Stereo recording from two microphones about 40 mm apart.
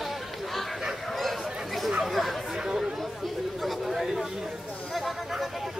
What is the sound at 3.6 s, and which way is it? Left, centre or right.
Chatter, centre.